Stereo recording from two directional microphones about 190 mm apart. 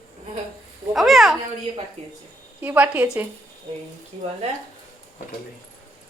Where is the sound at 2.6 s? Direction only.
10° right (ahead or behind).